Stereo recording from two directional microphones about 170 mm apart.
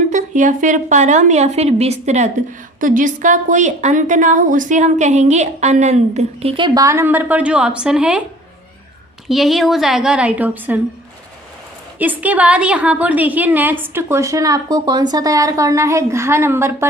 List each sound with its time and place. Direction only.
0.1 s a woman's voice: 45° right (ahead or behind); by 8.2 s 5° right (ahead or behind)
9.3 s a woman's voice: centre (ahead or behind)
11.9 s a woman's voice: 10° right (ahead or behind)